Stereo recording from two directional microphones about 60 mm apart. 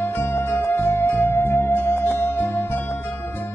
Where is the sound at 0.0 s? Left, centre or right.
Left.